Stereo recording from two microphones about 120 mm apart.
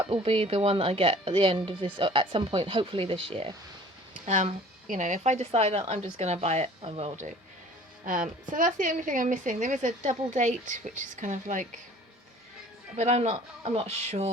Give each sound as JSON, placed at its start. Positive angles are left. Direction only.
{"t": 0.1, "sound": "speech", "side_deg": -55}
{"t": 4.3, "sound": "speech", "side_deg": -80}
{"t": 5.5, "sound": "speech", "side_deg": -60}
{"t": 8.0, "sound": "a woman's voice", "side_deg": -90}
{"t": 13.0, "sound": "speech", "side_deg": -60}